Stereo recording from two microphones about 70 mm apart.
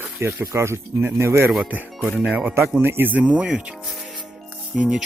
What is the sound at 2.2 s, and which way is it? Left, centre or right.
Speech, right.